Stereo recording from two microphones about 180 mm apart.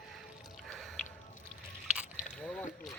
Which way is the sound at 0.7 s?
5° left (ahead or behind).